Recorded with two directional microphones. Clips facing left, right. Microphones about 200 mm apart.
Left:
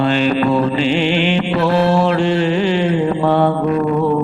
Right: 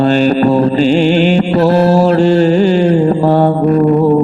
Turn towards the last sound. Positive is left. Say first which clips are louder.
# right 6 dB
turn(degrees=-35)  # may be behind; listen again after turning